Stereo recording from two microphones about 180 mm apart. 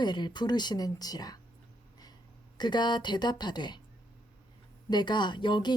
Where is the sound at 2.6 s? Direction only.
25° left (ahead or behind).